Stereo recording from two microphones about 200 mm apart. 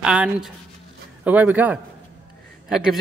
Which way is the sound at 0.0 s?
5° right (ahead or behind).